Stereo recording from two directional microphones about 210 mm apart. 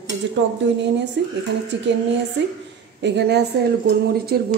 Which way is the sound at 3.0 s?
55° right (ahead or behind).